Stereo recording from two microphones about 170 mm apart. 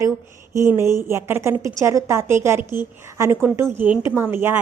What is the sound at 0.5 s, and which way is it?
A woman's voice, 15° right (ahead or behind).